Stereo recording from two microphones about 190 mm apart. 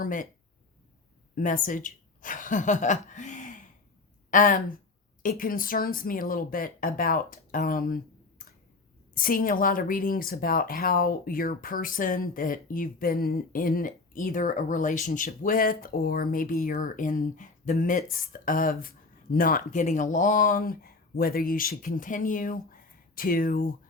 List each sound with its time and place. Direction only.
0.0 s speech: 45° left (ahead or behind)
1.4 s a woman's voice: 45° left (ahead or behind)
9.1 s speech: 45° left (ahead or behind)